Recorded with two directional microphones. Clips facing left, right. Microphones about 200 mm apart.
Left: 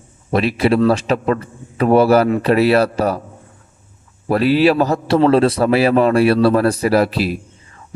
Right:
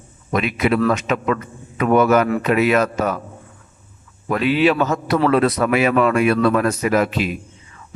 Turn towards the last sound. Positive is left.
turn(degrees=35)  # may be behind; listen again after turning